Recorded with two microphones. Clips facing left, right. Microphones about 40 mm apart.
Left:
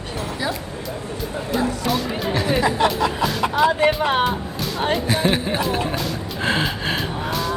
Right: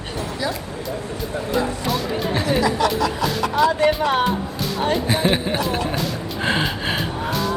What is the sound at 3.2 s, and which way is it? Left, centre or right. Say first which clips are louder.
Music: even; centre.